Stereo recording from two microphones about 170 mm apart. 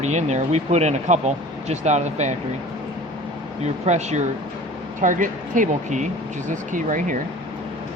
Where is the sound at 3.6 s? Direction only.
40° right (ahead or behind).